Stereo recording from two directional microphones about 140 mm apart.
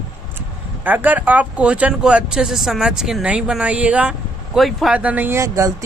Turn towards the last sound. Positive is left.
turn(degrees=-20)  # may be behind; listen again after turning